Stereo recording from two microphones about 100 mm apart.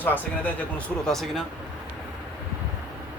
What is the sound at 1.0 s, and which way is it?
Speech, centre (ahead or behind).